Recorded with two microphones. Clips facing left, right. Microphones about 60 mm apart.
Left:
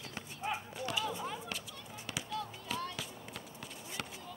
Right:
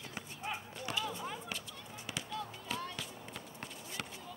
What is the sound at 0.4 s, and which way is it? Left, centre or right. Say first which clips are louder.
Horse: left 4 dB; centre.